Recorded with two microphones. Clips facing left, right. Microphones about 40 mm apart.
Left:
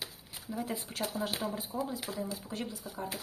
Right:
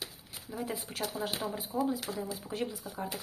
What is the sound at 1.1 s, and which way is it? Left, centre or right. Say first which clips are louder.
Speech: even; centre.